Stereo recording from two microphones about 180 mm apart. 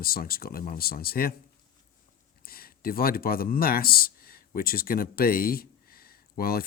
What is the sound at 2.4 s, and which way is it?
Speech, 55° left (ahead or behind).